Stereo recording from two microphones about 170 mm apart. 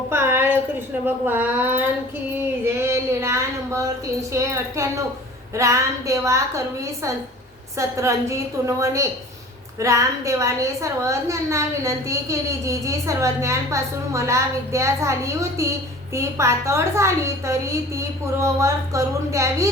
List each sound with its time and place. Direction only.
0.1 s a sound: 15° right (ahead or behind)
1.0 s a woman's voice: 10° right (ahead or behind)
7.8 s a woman's voice: 15° right (ahead or behind)